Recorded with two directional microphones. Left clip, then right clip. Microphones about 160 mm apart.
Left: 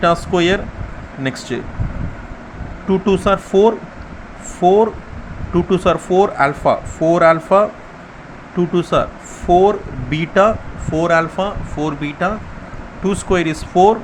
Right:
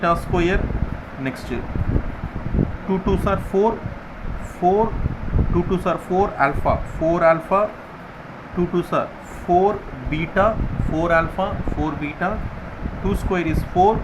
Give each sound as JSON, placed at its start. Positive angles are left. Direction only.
{"t": 0.0, "sound": "speech", "side_deg": 35}
{"t": 2.9, "sound": "speech", "side_deg": 35}